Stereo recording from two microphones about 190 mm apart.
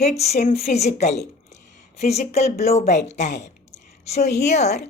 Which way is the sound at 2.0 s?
35° left (ahead or behind).